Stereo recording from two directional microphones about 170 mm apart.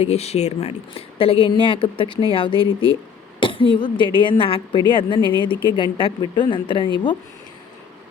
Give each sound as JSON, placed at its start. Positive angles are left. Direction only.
{"t": 0.0, "sound": "a woman's voice", "side_deg": 40}